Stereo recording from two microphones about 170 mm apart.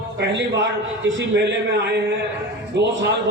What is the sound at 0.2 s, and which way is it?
A man's voice, 90° right.